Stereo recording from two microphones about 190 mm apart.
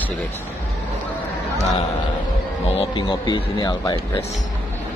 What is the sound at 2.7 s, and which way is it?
Speech, 30° left (ahead or behind).